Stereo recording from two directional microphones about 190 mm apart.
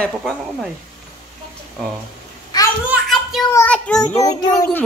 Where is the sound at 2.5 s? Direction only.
20° left (ahead or behind).